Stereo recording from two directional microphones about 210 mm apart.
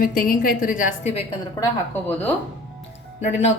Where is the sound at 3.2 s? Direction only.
30° left (ahead or behind).